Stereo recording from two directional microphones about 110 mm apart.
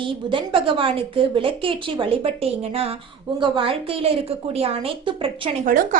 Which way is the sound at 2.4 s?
65° right (ahead or behind).